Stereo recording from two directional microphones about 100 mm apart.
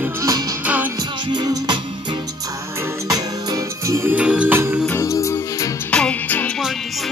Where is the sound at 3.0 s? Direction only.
35° right (ahead or behind).